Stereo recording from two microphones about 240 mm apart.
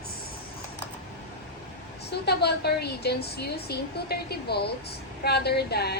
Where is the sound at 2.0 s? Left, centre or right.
Left.